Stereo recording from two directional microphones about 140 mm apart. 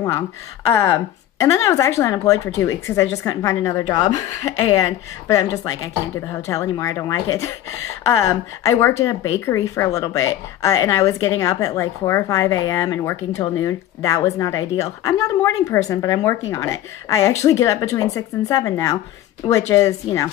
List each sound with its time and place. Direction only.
0.7 s speech: 20° left (ahead or behind)
5.3 s speech: 25° left (ahead or behind)